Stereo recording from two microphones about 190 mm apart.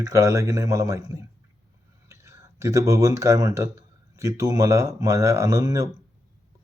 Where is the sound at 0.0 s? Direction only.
15° right (ahead or behind).